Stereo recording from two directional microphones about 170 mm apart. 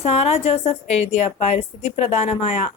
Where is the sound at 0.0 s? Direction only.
35° left (ahead or behind).